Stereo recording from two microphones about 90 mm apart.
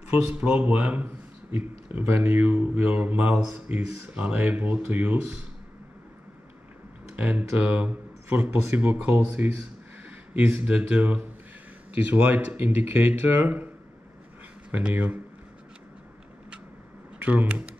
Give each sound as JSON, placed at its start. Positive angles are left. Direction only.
{"t": 0.1, "sound": "speech", "side_deg": -15}
{"t": 7.2, "sound": "speech", "side_deg": -15}
{"t": 14.7, "sound": "speech", "side_deg": -15}
{"t": 17.2, "sound": "speech", "side_deg": -15}